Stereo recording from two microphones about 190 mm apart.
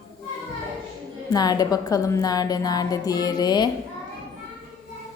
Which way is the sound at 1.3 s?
20° left (ahead or behind).